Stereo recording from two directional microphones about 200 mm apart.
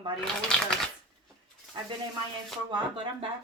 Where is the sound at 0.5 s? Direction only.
5° left (ahead or behind).